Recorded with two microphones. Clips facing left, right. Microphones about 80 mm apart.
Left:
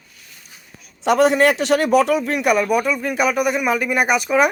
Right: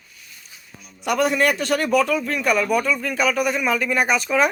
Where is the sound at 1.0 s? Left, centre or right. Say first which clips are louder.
Left 5 dB; left.